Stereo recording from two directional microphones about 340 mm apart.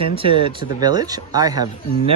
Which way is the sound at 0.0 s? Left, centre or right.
Centre.